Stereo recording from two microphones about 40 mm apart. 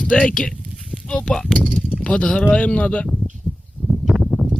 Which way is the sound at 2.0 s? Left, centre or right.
Left.